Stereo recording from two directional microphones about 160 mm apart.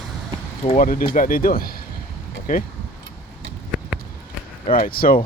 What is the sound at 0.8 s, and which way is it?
Speech, 60° left (ahead or behind).